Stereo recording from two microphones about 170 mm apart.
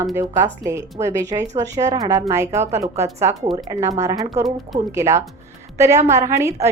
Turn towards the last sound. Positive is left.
turn(degrees=-20)  # may be behind; listen again after turning